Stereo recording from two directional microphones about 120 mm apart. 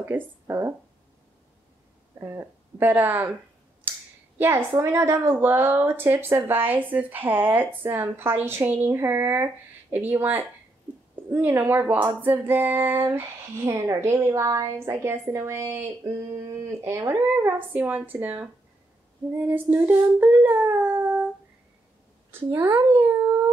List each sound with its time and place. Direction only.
0.0 s a woman's voice: 20° right (ahead or behind)
2.1 s a woman's voice: 25° right (ahead or behind)
4.4 s a woman's voice: 20° right (ahead or behind)
22.5 s a child's voice: 20° right (ahead or behind)